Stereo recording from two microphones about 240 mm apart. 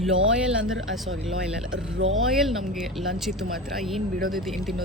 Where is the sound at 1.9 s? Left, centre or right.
Right.